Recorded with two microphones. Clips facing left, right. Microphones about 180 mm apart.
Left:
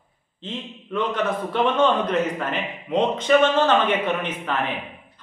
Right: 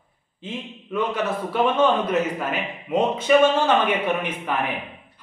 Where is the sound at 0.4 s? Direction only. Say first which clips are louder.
Even; 10° right (ahead or behind).